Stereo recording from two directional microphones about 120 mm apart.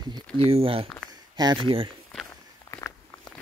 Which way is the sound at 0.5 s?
50° right (ahead or behind).